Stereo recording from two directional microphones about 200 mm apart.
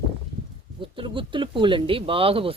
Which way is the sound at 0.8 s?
25° right (ahead or behind).